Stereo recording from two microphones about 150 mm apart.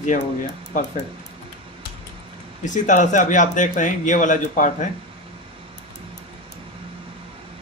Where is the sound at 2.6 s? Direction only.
55° left (ahead or behind).